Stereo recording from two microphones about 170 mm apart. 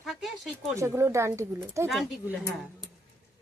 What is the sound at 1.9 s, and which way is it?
Speech, centre (ahead or behind).